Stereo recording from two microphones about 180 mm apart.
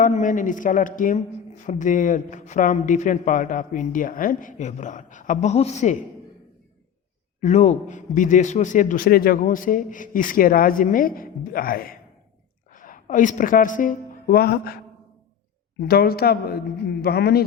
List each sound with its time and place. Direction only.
0.0 s a man's voice: 45° left (ahead or behind)
7.4 s a man's voice: 40° left (ahead or behind); by 14.8 s 60° left (ahead or behind)
15.9 s a man's voice: 60° left (ahead or behind)